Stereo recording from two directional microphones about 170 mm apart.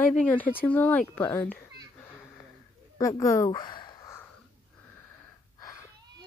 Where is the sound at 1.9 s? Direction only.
10° left (ahead or behind).